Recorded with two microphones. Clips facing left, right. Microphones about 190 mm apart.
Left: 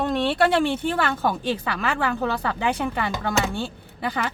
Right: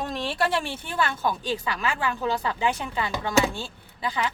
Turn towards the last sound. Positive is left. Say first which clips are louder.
# left 2 dB
turn(degrees=60)  # may be behind; listen again after turning